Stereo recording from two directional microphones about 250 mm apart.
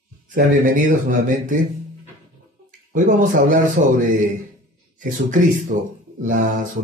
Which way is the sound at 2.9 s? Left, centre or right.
Right.